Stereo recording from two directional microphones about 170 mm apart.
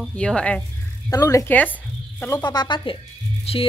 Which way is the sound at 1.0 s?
20° left (ahead or behind).